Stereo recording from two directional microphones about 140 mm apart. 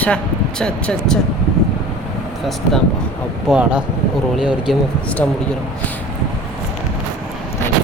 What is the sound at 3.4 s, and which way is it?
Speech, 5° right (ahead or behind).